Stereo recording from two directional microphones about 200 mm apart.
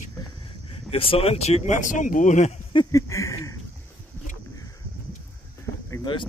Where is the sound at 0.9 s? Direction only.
30° left (ahead or behind).